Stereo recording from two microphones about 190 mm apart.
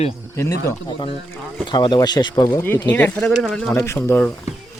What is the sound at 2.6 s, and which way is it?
Speech, 10° left (ahead or behind).